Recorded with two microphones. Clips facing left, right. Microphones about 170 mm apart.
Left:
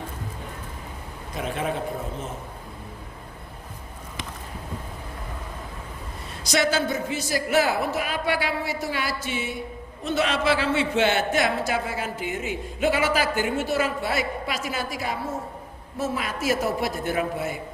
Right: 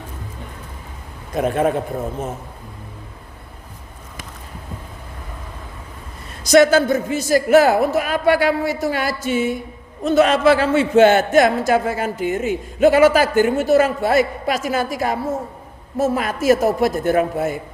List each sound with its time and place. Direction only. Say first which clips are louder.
1.4 s a man's voice: right 10 dB; 50° right (ahead or behind)
6.4 s a man's voice: right 11 dB; 50° right (ahead or behind)